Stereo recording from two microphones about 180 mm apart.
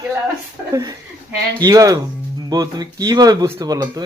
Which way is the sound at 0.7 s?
20° right (ahead or behind).